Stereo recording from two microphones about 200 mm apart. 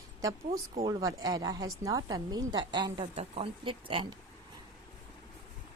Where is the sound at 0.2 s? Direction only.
15° right (ahead or behind).